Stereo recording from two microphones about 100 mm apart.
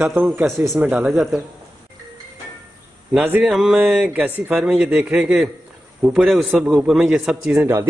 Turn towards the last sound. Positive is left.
turn(degrees=-25)  # may be behind; listen again after turning